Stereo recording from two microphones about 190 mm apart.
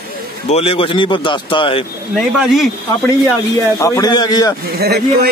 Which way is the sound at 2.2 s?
Centre (ahead or behind).